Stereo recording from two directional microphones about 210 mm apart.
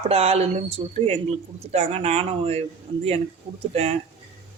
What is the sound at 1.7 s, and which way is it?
Speech, 30° right (ahead or behind).